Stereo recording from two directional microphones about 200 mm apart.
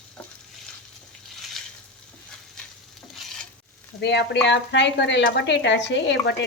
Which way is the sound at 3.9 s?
60° left (ahead or behind).